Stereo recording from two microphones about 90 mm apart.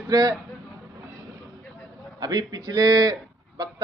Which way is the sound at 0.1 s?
45° right (ahead or behind).